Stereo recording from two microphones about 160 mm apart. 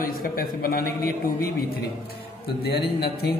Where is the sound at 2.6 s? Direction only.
80° left.